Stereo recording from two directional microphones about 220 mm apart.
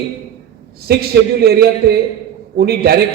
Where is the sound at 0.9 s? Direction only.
45° right (ahead or behind).